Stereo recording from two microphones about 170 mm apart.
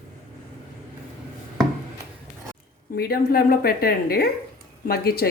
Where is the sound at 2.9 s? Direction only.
65° left (ahead or behind).